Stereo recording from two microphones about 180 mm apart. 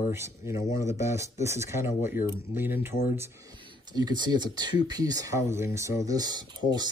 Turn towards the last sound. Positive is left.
turn(degrees=-25)  # may be behind; listen again after turning